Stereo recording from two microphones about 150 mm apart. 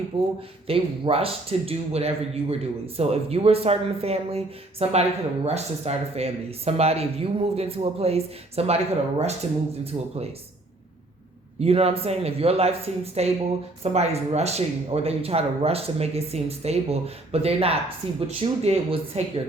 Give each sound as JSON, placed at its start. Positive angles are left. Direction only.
{"t": 0.1, "sound": "speech", "side_deg": -35}
{"t": 9.9, "sound": "speech", "side_deg": -30}
{"t": 11.6, "sound": "speech", "side_deg": -40}